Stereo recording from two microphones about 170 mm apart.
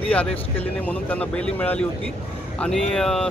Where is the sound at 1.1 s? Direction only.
10° left (ahead or behind).